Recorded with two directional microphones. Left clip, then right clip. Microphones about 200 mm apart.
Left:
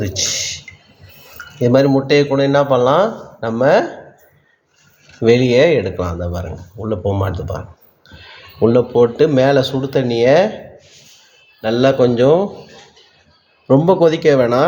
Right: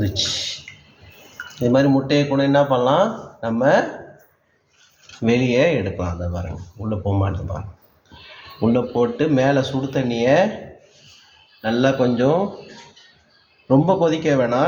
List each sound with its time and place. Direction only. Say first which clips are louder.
0.0 s a sound: left 3 dB; 50° left (ahead or behind)
1.6 s speech: left 4 dB; 45° left (ahead or behind)
5.2 s speech: left 6 dB; 45° left (ahead or behind)
8.7 s speech: left 6 dB; 45° left (ahead or behind)
11.6 s a man's voice: left 5 dB; 40° left (ahead or behind)
13.7 s speech: left 5 dB; 45° left (ahead or behind)